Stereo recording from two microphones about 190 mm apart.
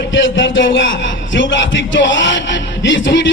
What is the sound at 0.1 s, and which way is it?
A man's voice, 80° left.